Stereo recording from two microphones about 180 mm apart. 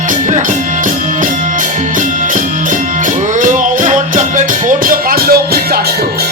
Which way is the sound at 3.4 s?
45° right (ahead or behind).